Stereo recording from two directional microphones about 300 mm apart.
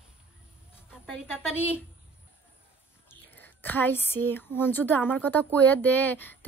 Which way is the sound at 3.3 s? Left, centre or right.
Centre.